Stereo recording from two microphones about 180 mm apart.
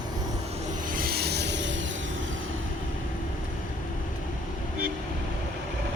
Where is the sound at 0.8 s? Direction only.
50° right (ahead or behind); by 2.5 s 90° right.